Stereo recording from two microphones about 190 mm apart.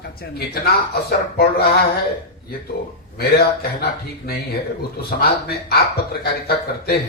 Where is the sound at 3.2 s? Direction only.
55° left (ahead or behind).